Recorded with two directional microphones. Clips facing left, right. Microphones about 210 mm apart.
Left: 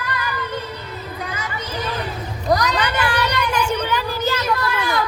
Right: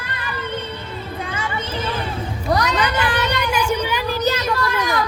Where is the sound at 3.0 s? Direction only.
20° right (ahead or behind).